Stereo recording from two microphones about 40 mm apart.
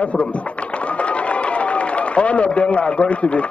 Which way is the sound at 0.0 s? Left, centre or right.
Left.